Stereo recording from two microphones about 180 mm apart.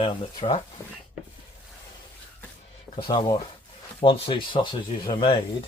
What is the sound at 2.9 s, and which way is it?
Speech, 25° left (ahead or behind).